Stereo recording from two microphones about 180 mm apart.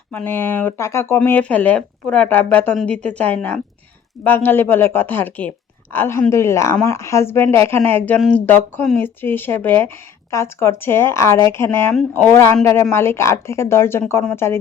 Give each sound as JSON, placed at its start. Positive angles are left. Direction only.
{"t": 0.1, "sound": "speech", "side_deg": 10}